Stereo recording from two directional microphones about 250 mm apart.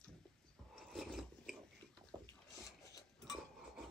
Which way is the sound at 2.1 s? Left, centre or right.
Centre.